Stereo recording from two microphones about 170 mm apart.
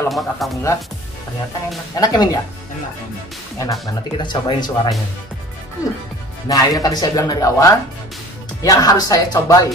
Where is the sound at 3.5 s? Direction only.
20° left (ahead or behind).